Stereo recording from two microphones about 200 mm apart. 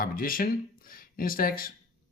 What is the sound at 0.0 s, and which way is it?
Speech, 45° left (ahead or behind).